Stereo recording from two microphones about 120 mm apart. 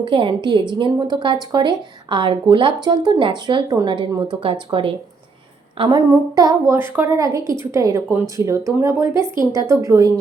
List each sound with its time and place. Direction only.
0.0 s a woman's voice: 45° right (ahead or behind)
5.9 s a woman's voice: 30° right (ahead or behind)